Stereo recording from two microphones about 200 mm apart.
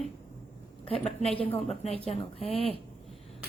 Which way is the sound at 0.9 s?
30° left (ahead or behind).